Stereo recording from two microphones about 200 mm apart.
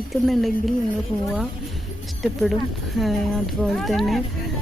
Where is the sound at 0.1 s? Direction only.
Centre (ahead or behind).